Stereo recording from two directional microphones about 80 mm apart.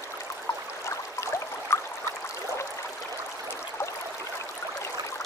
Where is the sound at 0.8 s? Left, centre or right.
Left.